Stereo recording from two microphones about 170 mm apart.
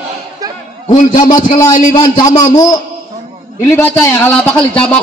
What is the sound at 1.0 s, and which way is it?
Speech, 50° left (ahead or behind).